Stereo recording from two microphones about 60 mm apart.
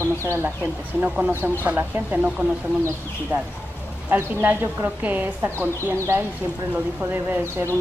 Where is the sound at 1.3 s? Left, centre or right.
Right.